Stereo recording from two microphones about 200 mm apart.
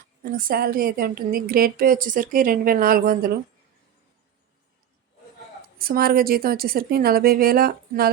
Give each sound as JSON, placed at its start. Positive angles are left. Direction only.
{"t": 0.2, "sound": "a woman's voice", "side_deg": -45}
{"t": 5.8, "sound": "a woman's voice", "side_deg": -45}